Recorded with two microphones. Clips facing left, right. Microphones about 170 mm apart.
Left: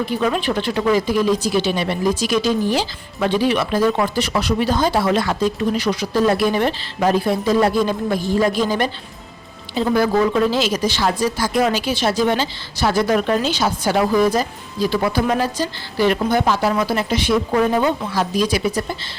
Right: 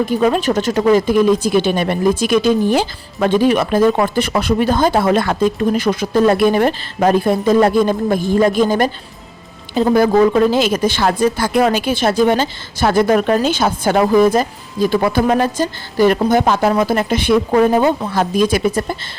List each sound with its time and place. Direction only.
0.0 s a woman's voice: 45° right (ahead or behind)
17.6 s a woman's voice: 45° right (ahead or behind)